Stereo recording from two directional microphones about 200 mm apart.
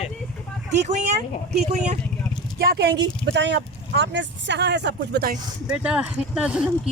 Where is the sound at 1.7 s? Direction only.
35° right (ahead or behind).